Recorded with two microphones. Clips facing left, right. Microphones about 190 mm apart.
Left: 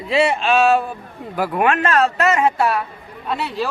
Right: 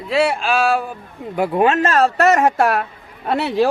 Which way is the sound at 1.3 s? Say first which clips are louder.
Right 3 dB; 25° right (ahead or behind).